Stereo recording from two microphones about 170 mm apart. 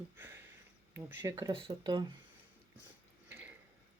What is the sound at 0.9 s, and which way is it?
Speech, 15° right (ahead or behind).